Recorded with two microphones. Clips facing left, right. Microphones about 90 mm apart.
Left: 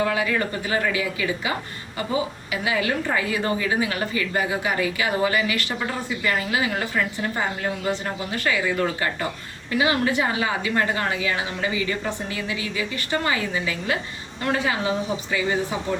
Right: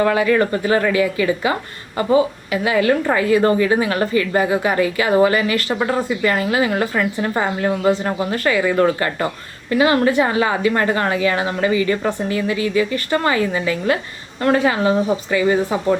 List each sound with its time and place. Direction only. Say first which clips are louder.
0.0 s a woman's voice: right 7 dB; 50° right (ahead or behind); by 8.4 s 70° right (ahead or behind)
8.6 s a woman's voice: right 7 dB; 55° right (ahead or behind)
14.4 s speech: right 8 dB; 55° right (ahead or behind)